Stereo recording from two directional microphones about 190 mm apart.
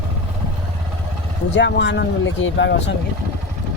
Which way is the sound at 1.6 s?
70° left (ahead or behind).